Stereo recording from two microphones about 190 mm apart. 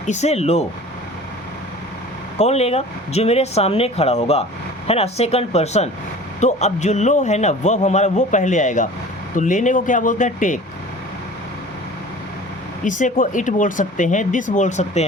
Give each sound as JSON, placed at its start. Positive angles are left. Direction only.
{"t": 0.0, "sound": "a man's voice", "side_deg": 40}
{"t": 2.4, "sound": "a man's voice", "side_deg": 35}
{"t": 12.8, "sound": "a man's voice", "side_deg": 40}